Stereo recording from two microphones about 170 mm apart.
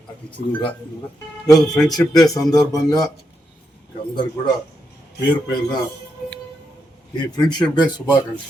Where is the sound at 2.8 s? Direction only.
20° left (ahead or behind).